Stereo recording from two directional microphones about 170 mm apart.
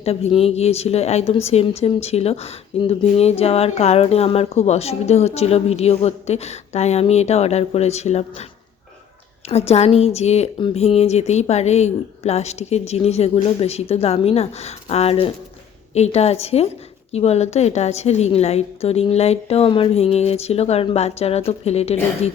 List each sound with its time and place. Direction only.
0.0 s a woman's voice: 35° left (ahead or behind)
9.5 s a woman's voice: 40° left (ahead or behind)